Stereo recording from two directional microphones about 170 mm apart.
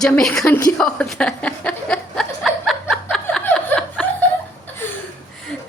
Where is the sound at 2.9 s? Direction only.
Centre (ahead or behind).